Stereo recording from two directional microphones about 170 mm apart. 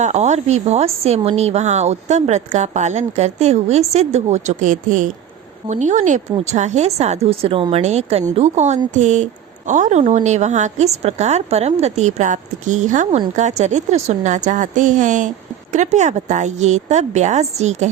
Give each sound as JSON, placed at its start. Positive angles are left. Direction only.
{"t": 0.0, "sound": "a woman's voice", "side_deg": -40}